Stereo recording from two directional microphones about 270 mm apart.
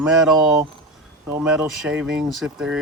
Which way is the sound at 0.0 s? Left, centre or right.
Centre.